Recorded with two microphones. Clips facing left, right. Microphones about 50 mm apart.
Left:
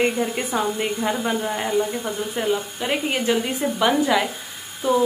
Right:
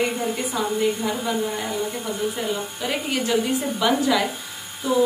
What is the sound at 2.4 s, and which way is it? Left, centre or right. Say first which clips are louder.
A woman's voice: left 3 dB; left.